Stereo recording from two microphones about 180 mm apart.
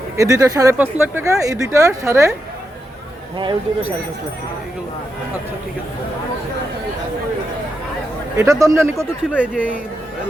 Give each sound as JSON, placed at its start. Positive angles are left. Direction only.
{"t": 0.2, "sound": "speech", "side_deg": -20}
{"t": 8.4, "sound": "speech", "side_deg": -15}